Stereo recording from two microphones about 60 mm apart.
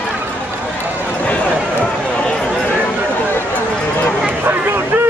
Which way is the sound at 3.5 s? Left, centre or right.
Left.